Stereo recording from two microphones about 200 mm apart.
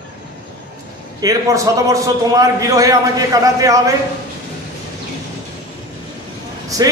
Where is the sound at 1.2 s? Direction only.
15° right (ahead or behind).